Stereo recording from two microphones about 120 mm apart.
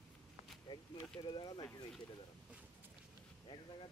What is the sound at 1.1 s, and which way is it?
Speech, 40° left (ahead or behind).